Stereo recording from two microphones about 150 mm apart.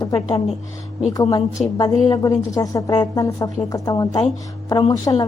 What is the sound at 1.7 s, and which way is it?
A woman's voice, 25° left (ahead or behind).